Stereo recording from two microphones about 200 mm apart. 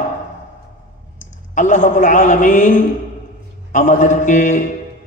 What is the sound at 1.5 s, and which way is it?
A man's voice, 40° left (ahead or behind).